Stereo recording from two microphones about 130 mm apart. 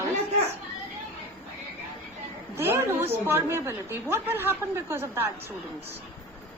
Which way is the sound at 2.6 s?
20° right (ahead or behind).